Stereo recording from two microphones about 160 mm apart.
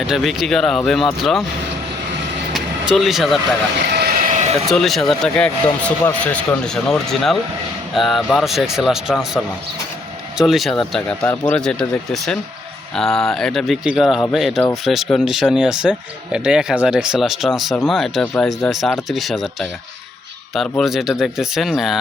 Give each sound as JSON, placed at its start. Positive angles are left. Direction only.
{"t": 0.1, "sound": "speech", "side_deg": 0}
{"t": 2.5, "sound": "vehicle", "side_deg": 0}
{"t": 3.9, "sound": "vehicle", "side_deg": -70}
{"t": 4.7, "sound": "speech", "side_deg": 0}